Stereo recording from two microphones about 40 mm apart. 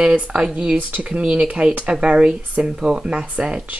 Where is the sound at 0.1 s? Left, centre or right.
Right.